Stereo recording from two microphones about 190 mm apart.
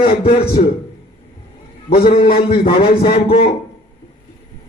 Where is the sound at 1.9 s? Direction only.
55° left (ahead or behind).